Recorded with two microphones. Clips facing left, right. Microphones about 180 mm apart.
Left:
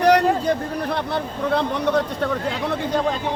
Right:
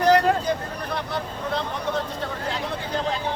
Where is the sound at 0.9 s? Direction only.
60° left (ahead or behind).